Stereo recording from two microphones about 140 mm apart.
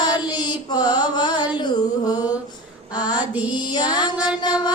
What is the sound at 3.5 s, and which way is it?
Mantra, 30° left (ahead or behind).